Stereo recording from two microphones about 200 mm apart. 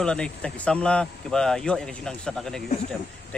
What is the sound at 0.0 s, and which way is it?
Speech, 5° left (ahead or behind).